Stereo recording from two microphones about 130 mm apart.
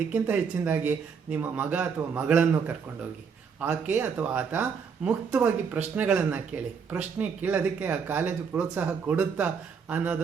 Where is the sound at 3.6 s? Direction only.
10° right (ahead or behind).